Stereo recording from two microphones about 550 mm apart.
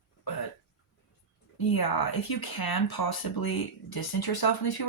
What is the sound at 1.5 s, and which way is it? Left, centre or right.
Speech, left.